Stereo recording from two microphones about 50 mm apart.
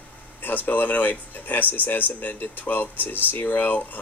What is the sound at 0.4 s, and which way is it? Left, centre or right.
Speech, left.